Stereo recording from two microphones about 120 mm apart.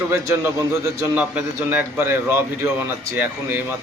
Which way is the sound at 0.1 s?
20° right (ahead or behind).